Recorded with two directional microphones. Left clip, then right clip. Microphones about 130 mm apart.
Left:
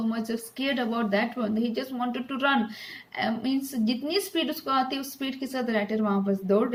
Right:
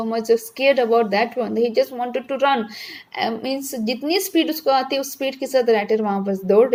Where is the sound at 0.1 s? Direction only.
30° right (ahead or behind).